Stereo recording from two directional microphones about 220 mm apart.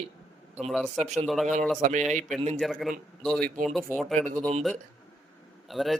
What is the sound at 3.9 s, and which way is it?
Speech, 5° left (ahead or behind).